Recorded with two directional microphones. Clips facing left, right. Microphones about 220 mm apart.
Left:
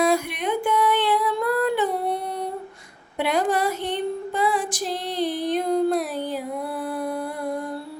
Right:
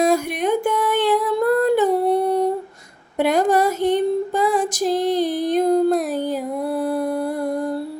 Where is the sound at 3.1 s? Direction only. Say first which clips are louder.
Right 5 dB; 45° right (ahead or behind).